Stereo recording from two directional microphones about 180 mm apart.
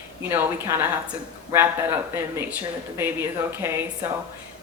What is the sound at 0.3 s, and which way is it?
Speech, 10° right (ahead or behind).